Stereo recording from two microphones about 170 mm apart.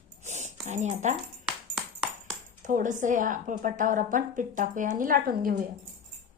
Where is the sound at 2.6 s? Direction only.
50° right (ahead or behind).